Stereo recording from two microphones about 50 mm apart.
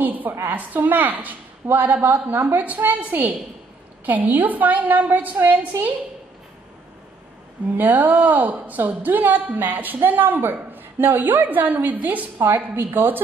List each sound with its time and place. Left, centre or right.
0.0 s a sound: right
0.5 s a woman's voice: right
7.7 s a woman's voice: right